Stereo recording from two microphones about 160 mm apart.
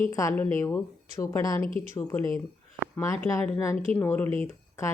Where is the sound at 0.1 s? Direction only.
20° left (ahead or behind).